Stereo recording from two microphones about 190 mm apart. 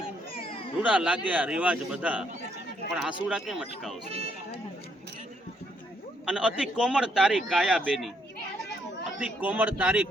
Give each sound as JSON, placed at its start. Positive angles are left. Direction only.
{"t": 0.0, "sound": "a sound", "side_deg": 30}
{"t": 0.8, "sound": "a man's voice", "side_deg": -5}
{"t": 6.2, "sound": "a man's voice", "side_deg": -5}
{"t": 9.1, "sound": "speech", "side_deg": -5}